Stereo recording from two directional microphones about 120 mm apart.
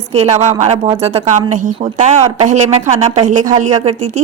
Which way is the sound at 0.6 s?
60° right (ahead or behind).